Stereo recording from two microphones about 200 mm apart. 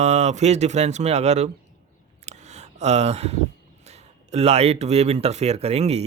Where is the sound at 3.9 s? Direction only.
30° right (ahead or behind).